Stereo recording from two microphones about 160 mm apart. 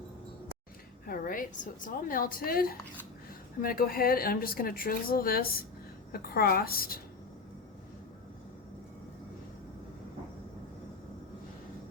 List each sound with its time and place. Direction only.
1.0 s a woman's voice: 65° left (ahead or behind)